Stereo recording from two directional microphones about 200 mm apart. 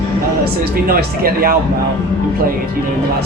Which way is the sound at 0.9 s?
50° right (ahead or behind).